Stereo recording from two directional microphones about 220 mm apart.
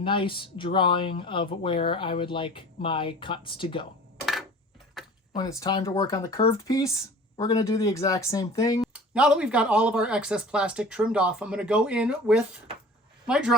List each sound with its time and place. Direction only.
0.0 s speech: 25° left (ahead or behind)
5.0 s a sound: centre (ahead or behind)
5.3 s speech: 15° left (ahead or behind)
8.8 s speech: 5° right (ahead or behind)